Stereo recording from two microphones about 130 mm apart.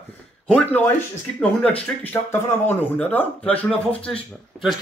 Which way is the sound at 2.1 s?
25° left (ahead or behind).